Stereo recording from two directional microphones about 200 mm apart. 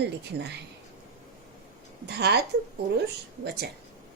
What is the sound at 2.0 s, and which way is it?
Speech, 55° right (ahead or behind).